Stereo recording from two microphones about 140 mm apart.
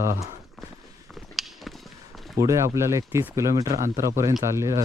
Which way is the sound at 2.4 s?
20° right (ahead or behind).